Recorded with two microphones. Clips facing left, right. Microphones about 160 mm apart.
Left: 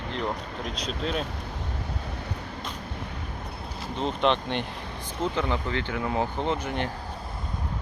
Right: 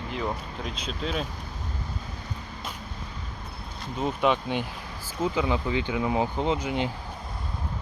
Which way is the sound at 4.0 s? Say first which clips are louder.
Even; 5° right (ahead or behind).